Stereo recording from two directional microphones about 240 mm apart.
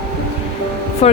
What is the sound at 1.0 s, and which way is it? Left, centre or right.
Speech, left.